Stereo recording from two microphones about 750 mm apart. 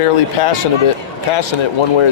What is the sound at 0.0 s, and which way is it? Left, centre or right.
Speech, left.